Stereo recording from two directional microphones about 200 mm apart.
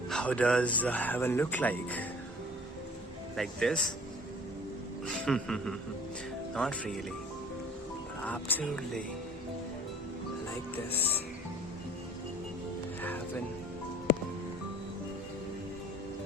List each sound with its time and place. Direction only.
0.1 s speech: 5° left (ahead or behind)
3.3 s speech: centre (ahead or behind)
5.0 s speech: 5° left (ahead or behind)
8.2 s speech: 10° left (ahead or behind)
10.9 s speech: 10° left (ahead or behind)